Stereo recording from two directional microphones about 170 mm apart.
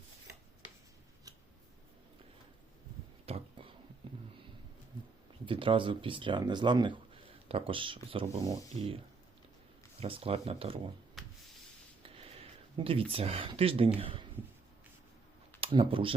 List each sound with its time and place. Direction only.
3.2 s a sound: 35° right (ahead or behind)
4.0 s sniff: 30° right (ahead or behind)
5.5 s speech: 30° right (ahead or behind)
10.0 s speech: 35° right (ahead or behind)
11.2 s a sound: centre (ahead or behind)
12.0 s speech: 35° right (ahead or behind)
15.6 s speech: 30° right (ahead or behind)